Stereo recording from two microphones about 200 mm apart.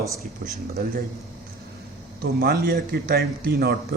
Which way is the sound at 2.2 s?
50° right (ahead or behind).